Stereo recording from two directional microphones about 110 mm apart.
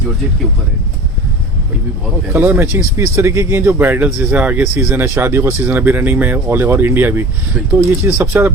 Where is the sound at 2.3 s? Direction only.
20° right (ahead or behind).